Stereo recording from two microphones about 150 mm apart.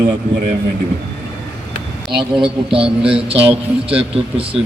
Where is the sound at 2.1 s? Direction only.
35° right (ahead or behind).